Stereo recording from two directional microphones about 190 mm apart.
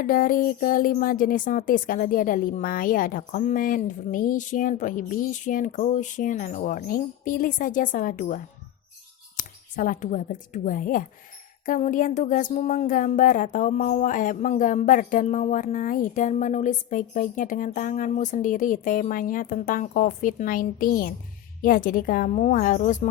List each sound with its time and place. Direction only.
0.0 s speech: 45° left (ahead or behind)
9.4 s speech: 45° left (ahead or behind)